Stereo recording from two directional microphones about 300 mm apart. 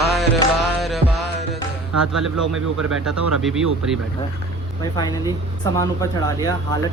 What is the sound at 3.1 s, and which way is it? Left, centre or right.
Speech, right.